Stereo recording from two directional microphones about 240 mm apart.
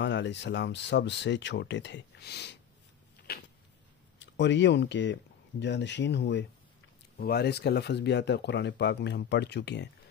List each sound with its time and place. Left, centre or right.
0.0 s speech: left
3.3 s a sound: left
4.2 s speech: left